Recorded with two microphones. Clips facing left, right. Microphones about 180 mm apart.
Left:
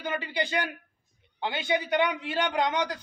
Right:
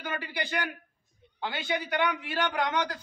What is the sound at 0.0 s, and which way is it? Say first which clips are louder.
A man's voice: left 4 dB; 20° left (ahead or behind).